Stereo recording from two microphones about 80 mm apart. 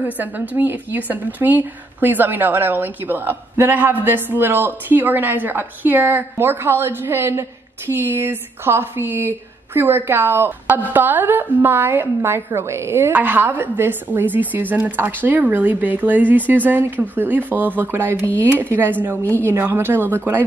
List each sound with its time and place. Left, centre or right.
0.0 s a woman's voice: right